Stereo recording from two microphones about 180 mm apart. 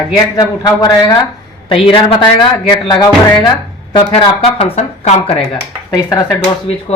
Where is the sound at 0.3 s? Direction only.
20° left (ahead or behind).